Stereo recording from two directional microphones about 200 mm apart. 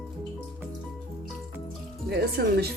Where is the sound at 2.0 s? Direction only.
55° right (ahead or behind).